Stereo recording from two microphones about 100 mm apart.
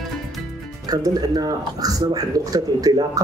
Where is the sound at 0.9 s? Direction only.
40° right (ahead or behind).